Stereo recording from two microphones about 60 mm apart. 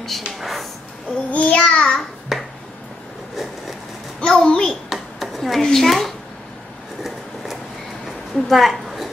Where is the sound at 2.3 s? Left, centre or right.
Centre.